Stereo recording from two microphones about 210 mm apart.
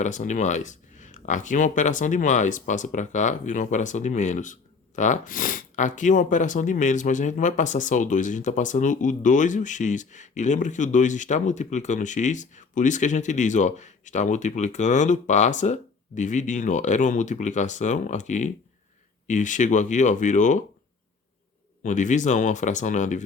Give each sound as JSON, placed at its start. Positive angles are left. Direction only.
{"t": 0.0, "sound": "speech", "side_deg": 35}
{"t": 21.8, "sound": "speech", "side_deg": 35}